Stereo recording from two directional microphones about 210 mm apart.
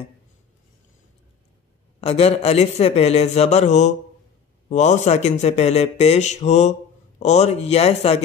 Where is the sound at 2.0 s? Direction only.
30° left (ahead or behind).